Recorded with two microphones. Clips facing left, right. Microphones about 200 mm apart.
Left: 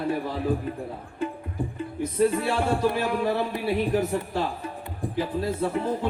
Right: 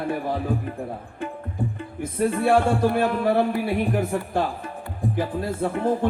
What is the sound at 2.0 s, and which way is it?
Speech, 50° right (ahead or behind).